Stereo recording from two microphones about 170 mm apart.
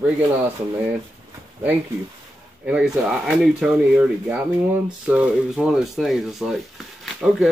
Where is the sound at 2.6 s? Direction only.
5° right (ahead or behind).